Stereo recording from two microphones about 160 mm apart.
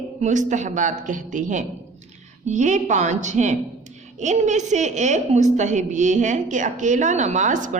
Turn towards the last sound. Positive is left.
turn(degrees=-50)  # may be behind; listen again after turning